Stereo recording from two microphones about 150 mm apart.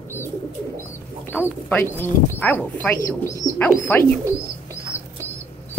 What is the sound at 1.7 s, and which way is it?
Speech, 15° left (ahead or behind).